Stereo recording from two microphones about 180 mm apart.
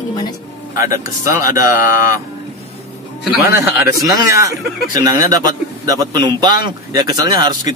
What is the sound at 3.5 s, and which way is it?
Speech, 15° right (ahead or behind).